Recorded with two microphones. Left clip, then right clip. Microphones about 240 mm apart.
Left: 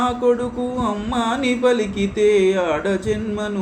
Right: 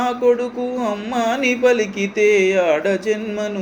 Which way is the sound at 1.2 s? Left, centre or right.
Centre.